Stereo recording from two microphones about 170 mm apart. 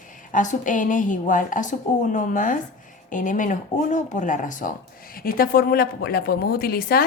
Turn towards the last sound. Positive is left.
turn(degrees=65)  # may be behind; listen again after turning